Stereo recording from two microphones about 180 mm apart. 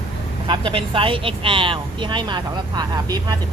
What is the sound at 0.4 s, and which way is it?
Speech, 30° right (ahead or behind).